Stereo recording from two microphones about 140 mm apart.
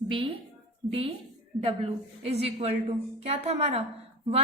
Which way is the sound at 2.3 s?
45° right (ahead or behind).